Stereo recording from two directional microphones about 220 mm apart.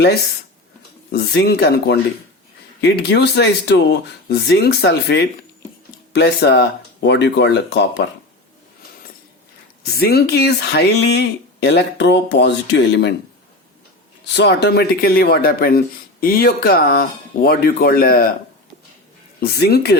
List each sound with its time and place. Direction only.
0.0 s speech: 45° left (ahead or behind)
9.8 s speech: 45° left (ahead or behind)
14.3 s speech: 50° left (ahead or behind)
19.4 s speech: 45° left (ahead or behind)